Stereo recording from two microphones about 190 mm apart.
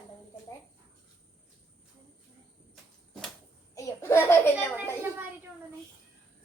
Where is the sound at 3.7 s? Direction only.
15° left (ahead or behind).